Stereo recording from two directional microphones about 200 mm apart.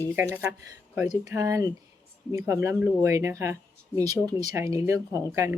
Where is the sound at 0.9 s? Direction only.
15° right (ahead or behind).